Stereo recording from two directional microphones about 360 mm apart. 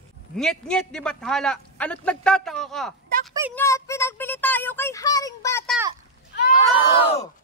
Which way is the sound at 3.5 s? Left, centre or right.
Centre.